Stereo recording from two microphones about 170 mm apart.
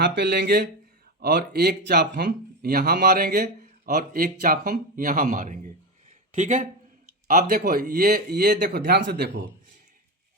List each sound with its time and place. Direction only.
0.0 s speech: 90° right; by 6.7 s 50° right (ahead or behind)
7.3 s speech: 60° right (ahead or behind); by 9.5 s 85° right